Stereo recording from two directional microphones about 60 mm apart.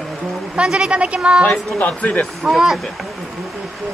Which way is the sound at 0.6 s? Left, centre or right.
Centre.